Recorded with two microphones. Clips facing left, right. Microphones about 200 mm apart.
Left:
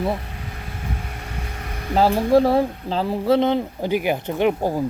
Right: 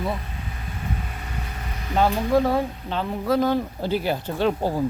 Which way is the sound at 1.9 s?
35° left (ahead or behind).